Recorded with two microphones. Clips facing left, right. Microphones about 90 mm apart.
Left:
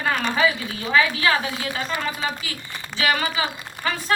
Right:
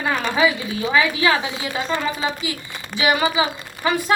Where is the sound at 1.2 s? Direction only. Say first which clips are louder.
Right 2 dB; 15° right (ahead or behind).